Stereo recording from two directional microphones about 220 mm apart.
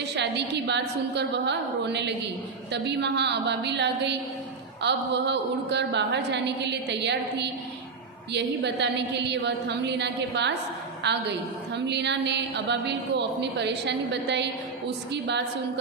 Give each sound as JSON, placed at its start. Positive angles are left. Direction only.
{"t": 0.2, "sound": "a woman's voice", "side_deg": -50}